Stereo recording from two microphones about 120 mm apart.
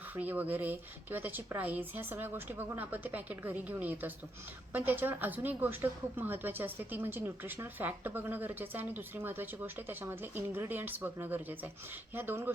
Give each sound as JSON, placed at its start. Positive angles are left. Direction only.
{"t": 0.2, "sound": "a woman's voice", "side_deg": -15}